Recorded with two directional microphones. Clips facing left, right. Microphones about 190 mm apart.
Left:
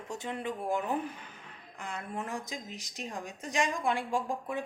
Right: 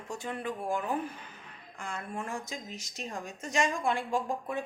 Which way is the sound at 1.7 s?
20° left (ahead or behind).